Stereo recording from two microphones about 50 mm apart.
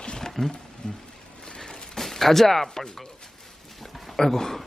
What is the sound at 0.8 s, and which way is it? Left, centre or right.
Speech, centre.